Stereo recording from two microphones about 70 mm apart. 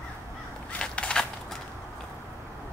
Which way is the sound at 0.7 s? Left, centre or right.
Centre.